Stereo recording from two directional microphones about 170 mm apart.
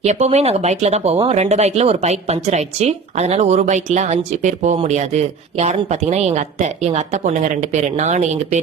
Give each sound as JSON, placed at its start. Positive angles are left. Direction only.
{"t": 0.0, "sound": "speech", "side_deg": -40}